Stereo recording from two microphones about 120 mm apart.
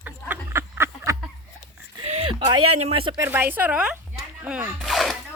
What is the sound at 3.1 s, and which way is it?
A woman's voice, 20° right (ahead or behind).